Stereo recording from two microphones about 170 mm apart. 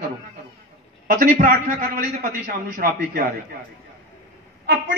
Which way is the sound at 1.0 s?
55° right (ahead or behind).